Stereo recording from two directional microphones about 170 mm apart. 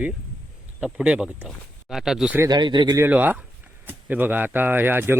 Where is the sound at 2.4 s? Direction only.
25° right (ahead or behind).